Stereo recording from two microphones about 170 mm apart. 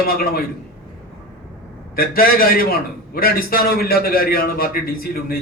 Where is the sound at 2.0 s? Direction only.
60° left (ahead or behind).